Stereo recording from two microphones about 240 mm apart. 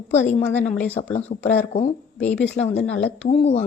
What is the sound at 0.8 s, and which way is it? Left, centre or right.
Speech, centre.